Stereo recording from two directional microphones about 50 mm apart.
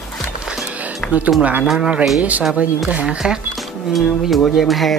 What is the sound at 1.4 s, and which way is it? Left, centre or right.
Speech, right.